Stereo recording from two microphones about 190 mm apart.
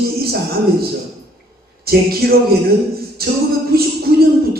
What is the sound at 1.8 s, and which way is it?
A man's voice, 55° right (ahead or behind).